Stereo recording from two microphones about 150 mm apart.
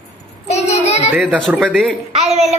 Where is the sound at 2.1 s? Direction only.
45° right (ahead or behind).